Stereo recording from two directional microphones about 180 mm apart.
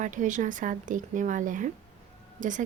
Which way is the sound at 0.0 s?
45° right (ahead or behind).